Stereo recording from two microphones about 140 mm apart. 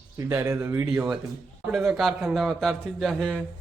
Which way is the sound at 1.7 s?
Centre (ahead or behind).